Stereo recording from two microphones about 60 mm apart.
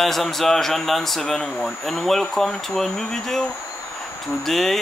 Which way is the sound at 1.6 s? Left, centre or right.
Centre.